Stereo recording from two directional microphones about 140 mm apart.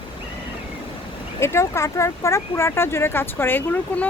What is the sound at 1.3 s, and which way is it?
Speech, 20° left (ahead or behind).